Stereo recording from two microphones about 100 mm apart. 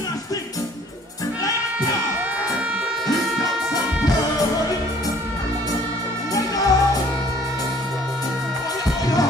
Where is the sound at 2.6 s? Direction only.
15° right (ahead or behind).